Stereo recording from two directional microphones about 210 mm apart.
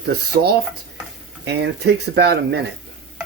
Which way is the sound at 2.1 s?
50° right (ahead or behind).